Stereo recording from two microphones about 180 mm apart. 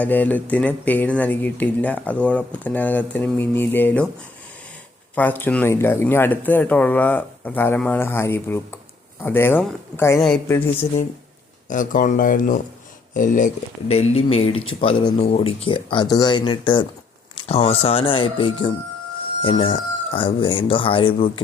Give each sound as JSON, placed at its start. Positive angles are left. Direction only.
{"t": 0.0, "sound": "speech", "side_deg": 10}
{"t": 5.1, "sound": "speech", "side_deg": 10}
{"t": 11.7, "sound": "speech", "side_deg": 50}